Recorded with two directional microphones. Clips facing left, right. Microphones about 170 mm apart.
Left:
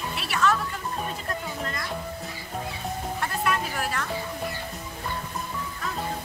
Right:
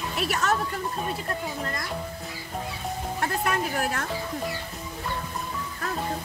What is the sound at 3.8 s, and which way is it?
Music, 45° right (ahead or behind).